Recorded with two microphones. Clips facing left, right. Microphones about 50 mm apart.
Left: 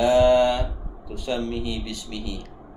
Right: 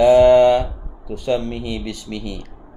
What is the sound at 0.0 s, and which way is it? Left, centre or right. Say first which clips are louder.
Mantra: right 7 dB; right.